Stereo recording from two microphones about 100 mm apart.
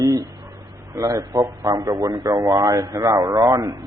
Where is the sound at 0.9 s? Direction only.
35° right (ahead or behind).